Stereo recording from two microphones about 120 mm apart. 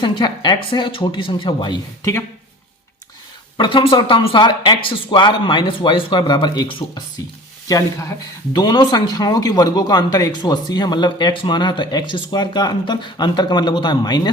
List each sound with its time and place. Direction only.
0.0 s speech: 40° left (ahead or behind)
3.6 s speech: 45° left (ahead or behind)
8.5 s speech: 40° left (ahead or behind)